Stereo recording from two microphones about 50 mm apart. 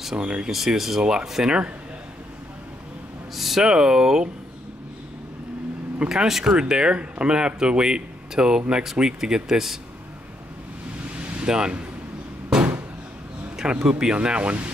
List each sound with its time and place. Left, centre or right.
0.2 s speech: centre
0.5 s speech: centre
3.3 s speech: centre
6.0 s speech: centre
11.4 s speech: centre
13.6 s speech: centre